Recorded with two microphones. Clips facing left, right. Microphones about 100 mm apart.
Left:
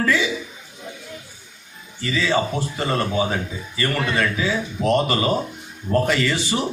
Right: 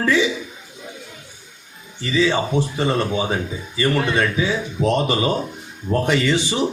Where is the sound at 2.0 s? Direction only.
20° right (ahead or behind).